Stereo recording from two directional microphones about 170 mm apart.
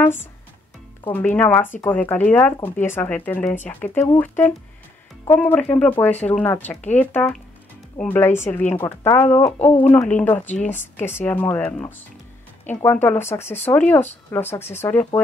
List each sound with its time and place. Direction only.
1.0 s speech: 10° left (ahead or behind)
5.2 s speech: 10° left (ahead or behind)
10.7 s speech: 45° left (ahead or behind)
11.1 s speech: 10° left (ahead or behind)